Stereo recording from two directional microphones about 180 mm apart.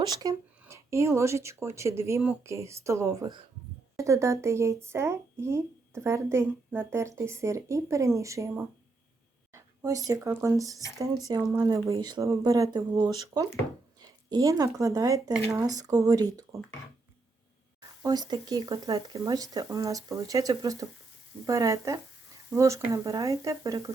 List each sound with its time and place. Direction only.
0.0 s speech: 20° right (ahead or behind)
9.6 s a sound: 20° right (ahead or behind)
10.2 s speech: 15° right (ahead or behind)
18.0 s speech: 20° right (ahead or behind)